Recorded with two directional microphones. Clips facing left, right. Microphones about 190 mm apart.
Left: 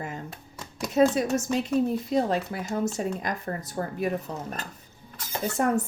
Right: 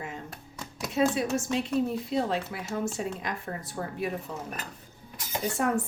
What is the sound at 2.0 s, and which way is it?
A woman's voice, 40° left (ahead or behind).